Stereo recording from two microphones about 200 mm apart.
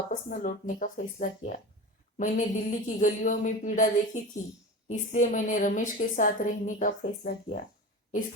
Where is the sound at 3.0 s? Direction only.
40° left (ahead or behind).